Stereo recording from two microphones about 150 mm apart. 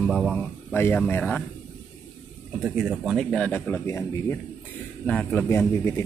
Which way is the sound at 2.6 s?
5° right (ahead or behind).